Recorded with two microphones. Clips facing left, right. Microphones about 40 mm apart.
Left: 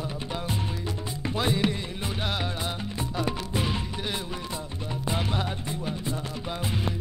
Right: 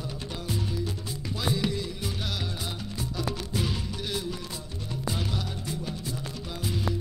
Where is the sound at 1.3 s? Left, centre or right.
Left.